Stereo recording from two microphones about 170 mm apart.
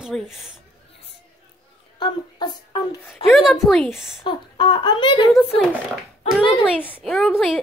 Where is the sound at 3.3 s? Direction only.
Centre (ahead or behind).